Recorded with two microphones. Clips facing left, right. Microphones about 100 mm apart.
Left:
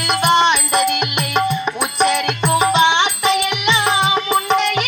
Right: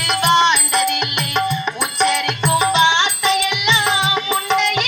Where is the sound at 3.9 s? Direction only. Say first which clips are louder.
Left 3 dB; 45° left (ahead or behind).